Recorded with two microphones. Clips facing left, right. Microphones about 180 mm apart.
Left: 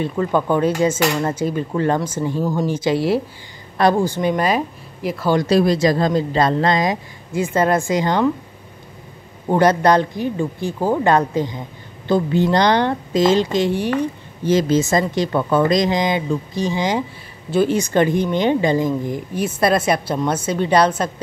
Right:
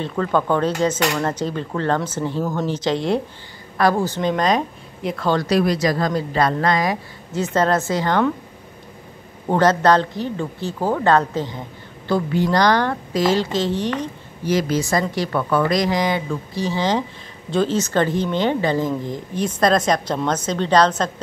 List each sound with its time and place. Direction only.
0.0 s speech: 10° left (ahead or behind)
3.7 s speech: 20° left (ahead or behind)
5.4 s speech: 30° left (ahead or behind)
7.3 s speech: 10° left (ahead or behind)
9.5 s speech: 15° left (ahead or behind)
14.4 s speech: 25° left (ahead or behind)